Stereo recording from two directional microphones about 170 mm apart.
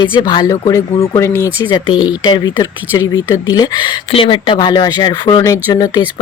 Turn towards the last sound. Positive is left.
turn(degrees=20)  # may be behind; listen again after turning